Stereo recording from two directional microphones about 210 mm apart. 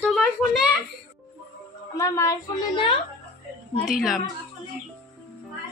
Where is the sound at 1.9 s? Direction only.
15° left (ahead or behind).